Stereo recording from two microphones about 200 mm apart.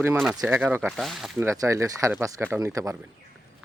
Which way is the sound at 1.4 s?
15° right (ahead or behind).